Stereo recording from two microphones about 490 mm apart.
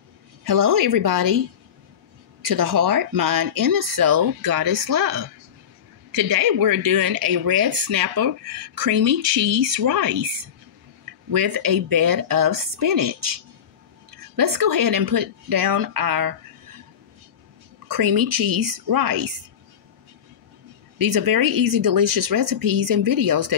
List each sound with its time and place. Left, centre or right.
0.4 s speech: right
2.4 s speech: right
11.3 s speech: right
17.8 s speech: right
21.0 s speech: right